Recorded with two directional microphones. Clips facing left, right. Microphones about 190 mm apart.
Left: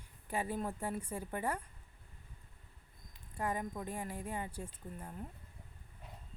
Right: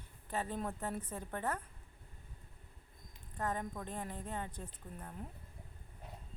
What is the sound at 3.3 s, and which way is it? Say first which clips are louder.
Speech: left 1 dB; 10° left (ahead or behind).